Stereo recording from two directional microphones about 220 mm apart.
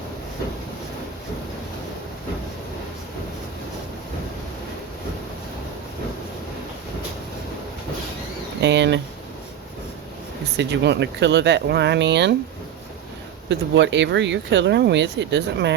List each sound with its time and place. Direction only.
8.6 s speech: 50° right (ahead or behind)
10.6 s speech: 50° right (ahead or behind)
13.5 s speech: 55° right (ahead or behind)